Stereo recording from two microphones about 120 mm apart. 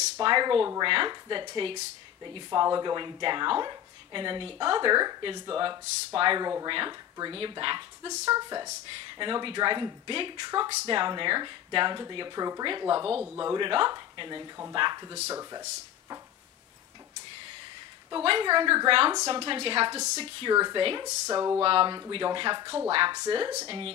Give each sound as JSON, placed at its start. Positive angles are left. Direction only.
{"t": 0.2, "sound": "a woman's voice", "side_deg": -40}
{"t": 15.2, "sound": "speech", "side_deg": -25}
{"t": 18.1, "sound": "a woman's voice", "side_deg": -45}
{"t": 19.1, "sound": "speech", "side_deg": -30}
{"t": 19.4, "sound": "a woman's voice", "side_deg": -50}
{"t": 20.5, "sound": "speech", "side_deg": -35}
{"t": 21.3, "sound": "a sound", "side_deg": -30}
{"t": 21.5, "sound": "a woman's voice", "side_deg": -50}
{"t": 21.8, "sound": "speech", "side_deg": -35}